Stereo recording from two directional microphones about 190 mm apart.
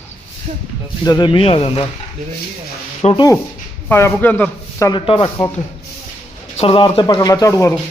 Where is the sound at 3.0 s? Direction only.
25° left (ahead or behind).